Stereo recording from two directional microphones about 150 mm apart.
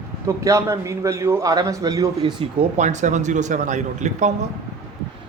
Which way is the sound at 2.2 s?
35° right (ahead or behind).